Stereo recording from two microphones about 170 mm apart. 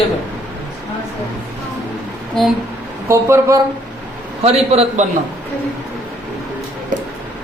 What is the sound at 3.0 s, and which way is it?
Speech, 15° right (ahead or behind).